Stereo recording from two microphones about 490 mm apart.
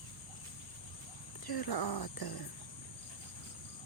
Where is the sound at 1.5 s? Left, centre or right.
Left.